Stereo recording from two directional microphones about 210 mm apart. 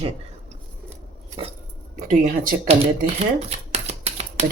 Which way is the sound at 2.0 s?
40° right (ahead or behind).